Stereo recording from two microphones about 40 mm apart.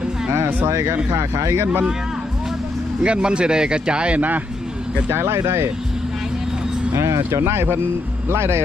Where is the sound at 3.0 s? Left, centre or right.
Right.